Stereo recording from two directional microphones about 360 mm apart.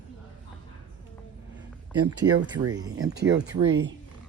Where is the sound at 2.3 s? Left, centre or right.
Right.